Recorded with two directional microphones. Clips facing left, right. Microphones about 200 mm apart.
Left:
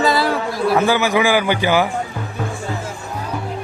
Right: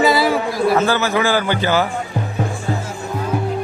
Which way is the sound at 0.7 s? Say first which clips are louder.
Left 1 dB; 15° left (ahead or behind).